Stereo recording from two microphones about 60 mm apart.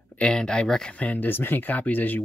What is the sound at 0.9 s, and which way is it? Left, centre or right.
Speech, left.